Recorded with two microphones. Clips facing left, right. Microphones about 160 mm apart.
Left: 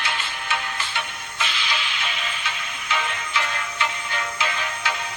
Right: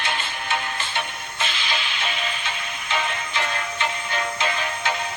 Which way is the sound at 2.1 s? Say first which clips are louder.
Right 2 dB; 35° right (ahead or behind).